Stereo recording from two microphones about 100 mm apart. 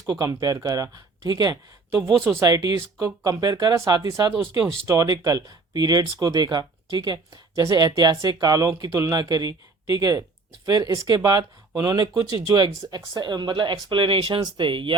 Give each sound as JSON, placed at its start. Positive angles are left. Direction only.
{"t": 0.1, "sound": "speech", "side_deg": -35}